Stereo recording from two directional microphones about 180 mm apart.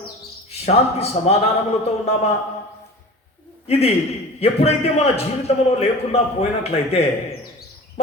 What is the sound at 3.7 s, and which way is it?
Speech, 35° left (ahead or behind).